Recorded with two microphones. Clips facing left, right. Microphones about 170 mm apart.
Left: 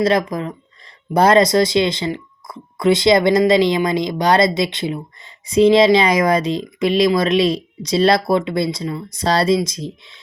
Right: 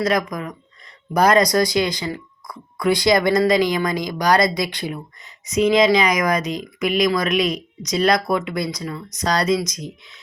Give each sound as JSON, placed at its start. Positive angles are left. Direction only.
{"t": 0.0, "sound": "speech", "side_deg": 30}